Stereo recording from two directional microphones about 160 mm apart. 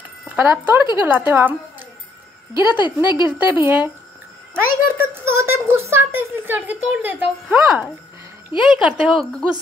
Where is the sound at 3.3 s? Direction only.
10° right (ahead or behind).